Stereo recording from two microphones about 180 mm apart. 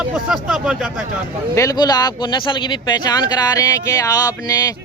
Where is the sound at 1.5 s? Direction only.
20° left (ahead or behind).